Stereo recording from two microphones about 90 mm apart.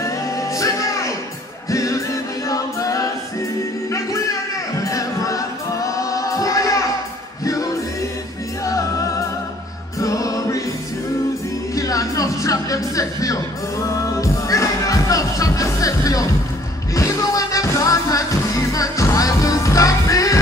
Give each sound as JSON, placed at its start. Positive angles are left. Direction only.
{"t": 0.0, "sound": "music", "side_deg": 35}
{"t": 9.9, "sound": "music", "side_deg": 40}
{"t": 11.7, "sound": "music", "side_deg": 40}